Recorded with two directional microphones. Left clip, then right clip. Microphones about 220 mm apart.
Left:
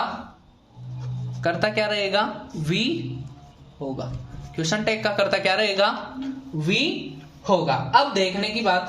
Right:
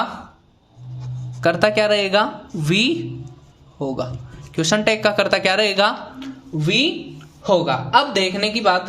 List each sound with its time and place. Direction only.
1.4 s a man's voice: 40° right (ahead or behind)